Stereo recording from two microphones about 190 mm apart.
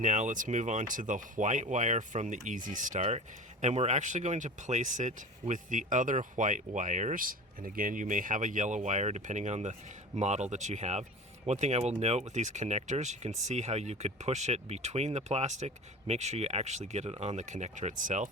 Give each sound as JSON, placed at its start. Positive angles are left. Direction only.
{"t": 0.0, "sound": "speech", "side_deg": -40}